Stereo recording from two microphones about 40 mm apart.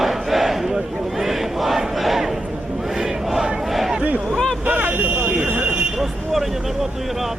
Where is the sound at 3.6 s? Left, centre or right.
Centre.